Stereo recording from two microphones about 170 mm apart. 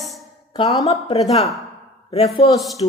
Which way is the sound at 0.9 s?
35° left (ahead or behind).